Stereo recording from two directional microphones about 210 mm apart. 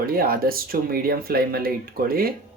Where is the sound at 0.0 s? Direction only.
45° right (ahead or behind).